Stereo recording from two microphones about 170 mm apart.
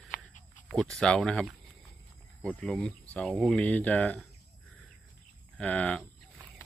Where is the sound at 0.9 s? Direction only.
5° left (ahead or behind).